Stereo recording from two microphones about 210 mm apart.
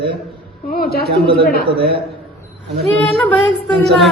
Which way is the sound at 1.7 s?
50° right (ahead or behind).